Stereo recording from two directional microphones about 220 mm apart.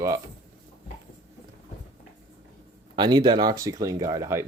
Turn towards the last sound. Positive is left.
turn(degrees=-15)  # may be behind; listen again after turning